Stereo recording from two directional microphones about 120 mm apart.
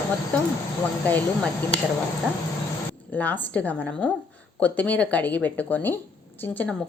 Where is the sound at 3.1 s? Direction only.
15° left (ahead or behind).